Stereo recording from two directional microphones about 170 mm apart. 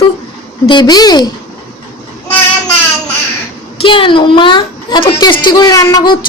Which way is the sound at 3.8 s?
30° left (ahead or behind).